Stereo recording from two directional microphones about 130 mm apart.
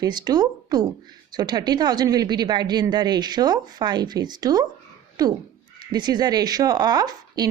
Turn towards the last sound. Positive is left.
turn(degrees=-30)  # may be behind; listen again after turning